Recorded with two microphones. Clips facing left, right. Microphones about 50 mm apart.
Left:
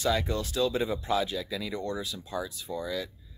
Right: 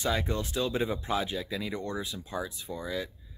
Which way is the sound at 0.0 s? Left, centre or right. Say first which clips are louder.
Left 2 dB; right.